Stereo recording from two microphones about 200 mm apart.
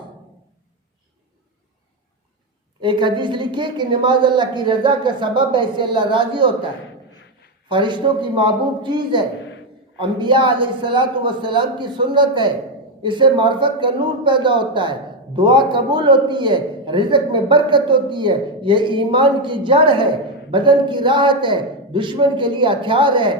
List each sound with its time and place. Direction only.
2.8 s speech: 25° right (ahead or behind)
7.7 s speech: 25° right (ahead or behind)